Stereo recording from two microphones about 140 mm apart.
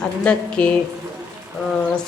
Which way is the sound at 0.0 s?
10° left (ahead or behind).